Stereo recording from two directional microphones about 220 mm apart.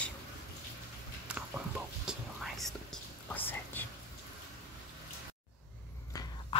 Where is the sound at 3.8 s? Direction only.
10° left (ahead or behind).